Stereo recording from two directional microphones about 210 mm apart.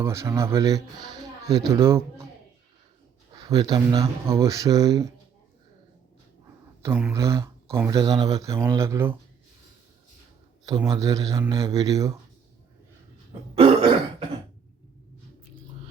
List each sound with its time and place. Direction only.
0.0 s speech: 15° right (ahead or behind)
3.3 s speech: 20° right (ahead or behind)
6.8 s speech: 10° right (ahead or behind)
10.7 s speech: 15° right (ahead or behind)
13.6 s throat clearing: 25° right (ahead or behind)